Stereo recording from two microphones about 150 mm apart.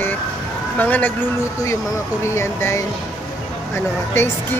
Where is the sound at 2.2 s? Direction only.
20° left (ahead or behind).